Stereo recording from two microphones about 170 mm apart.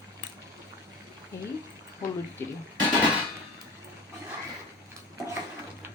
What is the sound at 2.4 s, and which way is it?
Speech, 15° left (ahead or behind).